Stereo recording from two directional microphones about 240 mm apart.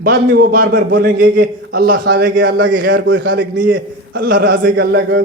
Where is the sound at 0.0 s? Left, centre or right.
Right.